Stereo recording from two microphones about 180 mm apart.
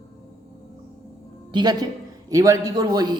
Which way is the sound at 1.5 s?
25° right (ahead or behind).